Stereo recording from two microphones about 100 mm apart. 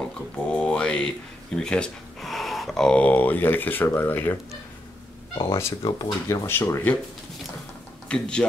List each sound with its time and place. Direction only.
0.0 s a sound: 10° left (ahead or behind)
1.6 s speech: 10° left (ahead or behind)
5.5 s speech: 25° left (ahead or behind)
5.8 s speech: 55° left (ahead or behind)
6.2 s speech: 25° left (ahead or behind)
8.1 s speech: 10° left (ahead or behind)